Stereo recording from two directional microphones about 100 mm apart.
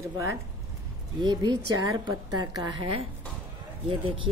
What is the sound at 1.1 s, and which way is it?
A woman's voice, 45° right (ahead or behind).